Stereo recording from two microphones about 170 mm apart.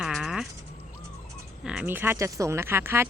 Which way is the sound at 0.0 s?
Centre (ahead or behind).